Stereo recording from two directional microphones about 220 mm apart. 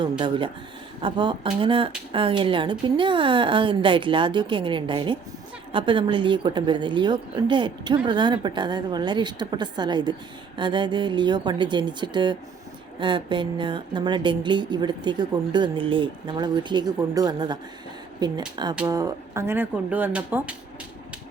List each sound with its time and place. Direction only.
0.0 s speech: 20° right (ahead or behind); by 20.6 s 5° right (ahead or behind)